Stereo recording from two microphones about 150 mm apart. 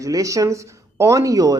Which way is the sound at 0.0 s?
20° right (ahead or behind).